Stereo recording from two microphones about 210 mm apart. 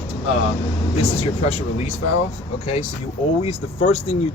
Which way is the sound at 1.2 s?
30° left (ahead or behind).